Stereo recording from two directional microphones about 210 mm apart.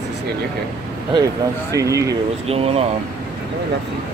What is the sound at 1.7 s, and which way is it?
Speech, 15° right (ahead or behind).